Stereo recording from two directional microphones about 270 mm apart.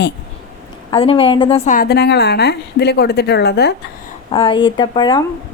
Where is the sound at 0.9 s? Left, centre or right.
Centre; by 3.7 s left.